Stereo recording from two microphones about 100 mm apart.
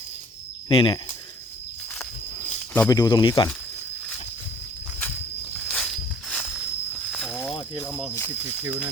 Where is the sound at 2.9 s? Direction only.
45° left (ahead or behind).